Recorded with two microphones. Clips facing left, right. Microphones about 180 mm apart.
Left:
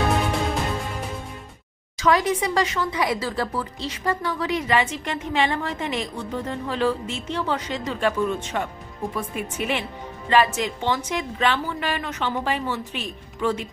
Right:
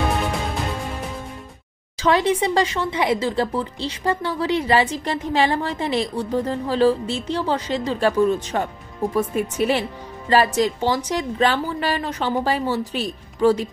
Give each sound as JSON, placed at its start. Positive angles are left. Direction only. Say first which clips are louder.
{"t": 2.0, "sound": "speech", "louder": "right 2 dB", "side_deg": -30}